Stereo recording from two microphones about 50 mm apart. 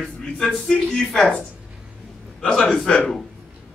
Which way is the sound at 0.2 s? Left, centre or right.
Centre.